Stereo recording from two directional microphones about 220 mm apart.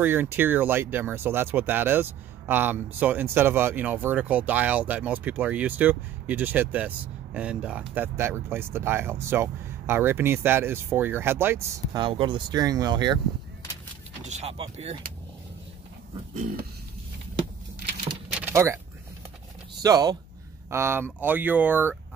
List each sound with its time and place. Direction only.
0.0 s speech: 10° right (ahead or behind)
12.0 s speech: 20° right (ahead or behind)
14.2 s speech: 30° right (ahead or behind)
16.3 s a sound: 40° right (ahead or behind)
18.3 s vehicle: 10° right (ahead or behind)
19.8 s speech: 15° right (ahead or behind)